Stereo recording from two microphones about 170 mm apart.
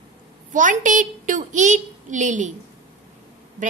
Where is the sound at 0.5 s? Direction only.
50° right (ahead or behind).